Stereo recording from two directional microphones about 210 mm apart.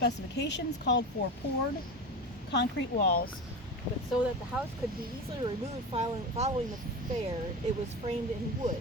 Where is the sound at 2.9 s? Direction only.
40° left (ahead or behind).